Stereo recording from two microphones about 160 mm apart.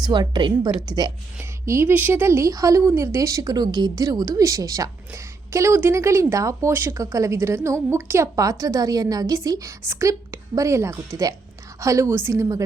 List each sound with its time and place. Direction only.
0.0 s a woman's voice: 30° right (ahead or behind)